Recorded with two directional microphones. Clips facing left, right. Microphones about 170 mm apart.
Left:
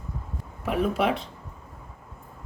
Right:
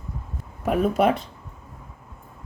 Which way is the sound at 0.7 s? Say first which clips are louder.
Right 4 dB; 45° right (ahead or behind).